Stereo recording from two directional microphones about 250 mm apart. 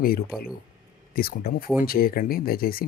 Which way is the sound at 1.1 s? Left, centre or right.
Left.